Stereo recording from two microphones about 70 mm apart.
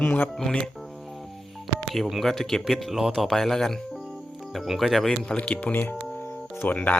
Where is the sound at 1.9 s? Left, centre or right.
Centre.